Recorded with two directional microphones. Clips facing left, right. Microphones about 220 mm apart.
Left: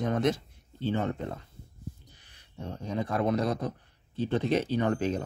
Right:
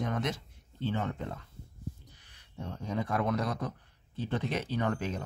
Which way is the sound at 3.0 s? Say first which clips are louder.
Left 4 dB; 30° left (ahead or behind).